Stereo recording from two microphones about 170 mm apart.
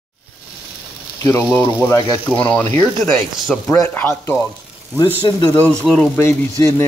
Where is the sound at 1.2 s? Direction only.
15° left (ahead or behind).